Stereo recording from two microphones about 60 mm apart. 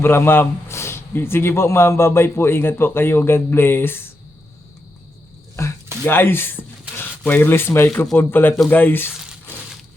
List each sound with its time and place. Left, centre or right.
0.0 s speech: left
6.1 s speech: left